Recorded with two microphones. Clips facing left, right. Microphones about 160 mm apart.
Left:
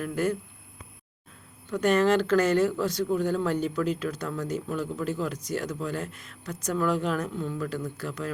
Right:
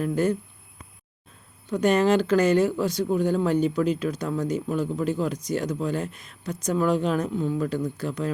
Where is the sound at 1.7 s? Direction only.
15° right (ahead or behind).